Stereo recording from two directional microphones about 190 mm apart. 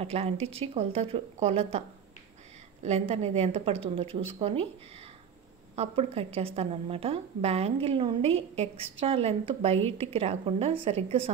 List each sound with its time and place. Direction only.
0.0 s a woman's voice: 30° right (ahead or behind)
2.8 s a woman's voice: 35° right (ahead or behind)
5.8 s a woman's voice: 30° right (ahead or behind)